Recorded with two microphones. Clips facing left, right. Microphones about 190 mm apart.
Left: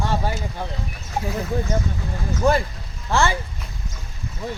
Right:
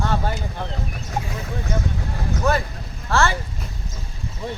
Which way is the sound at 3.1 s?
15° left (ahead or behind).